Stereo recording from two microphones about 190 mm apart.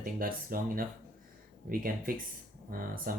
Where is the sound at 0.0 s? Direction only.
50° right (ahead or behind).